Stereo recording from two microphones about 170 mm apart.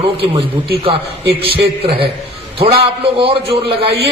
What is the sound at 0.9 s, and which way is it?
A man's voice, 30° right (ahead or behind).